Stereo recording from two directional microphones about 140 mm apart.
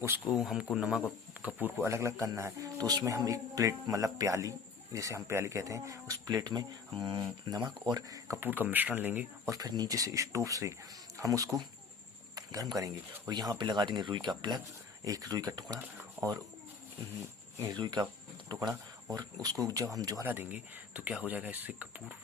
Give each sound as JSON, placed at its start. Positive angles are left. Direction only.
{"t": 0.3, "sound": "speech", "side_deg": -5}
{"t": 9.6, "sound": "speech", "side_deg": -30}
{"t": 17.6, "sound": "speech", "side_deg": -30}
{"t": 20.2, "sound": "speech", "side_deg": -15}